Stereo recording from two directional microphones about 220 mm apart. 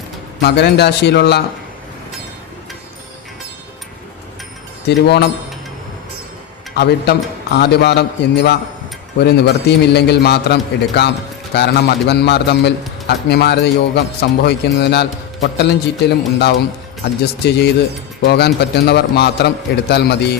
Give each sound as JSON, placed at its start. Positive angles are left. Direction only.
{"t": 0.4, "sound": "a man's voice", "side_deg": 50}
{"t": 4.9, "sound": "a man's voice", "side_deg": 50}
{"t": 6.7, "sound": "a man's voice", "side_deg": 45}